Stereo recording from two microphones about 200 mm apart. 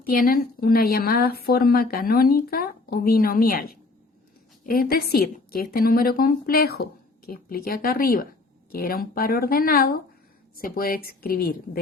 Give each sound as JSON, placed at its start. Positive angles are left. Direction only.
{"t": 0.0, "sound": "a woman's voice", "side_deg": 45}